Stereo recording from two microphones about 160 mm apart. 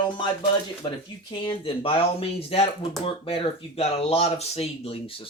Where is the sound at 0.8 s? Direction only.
30° left (ahead or behind).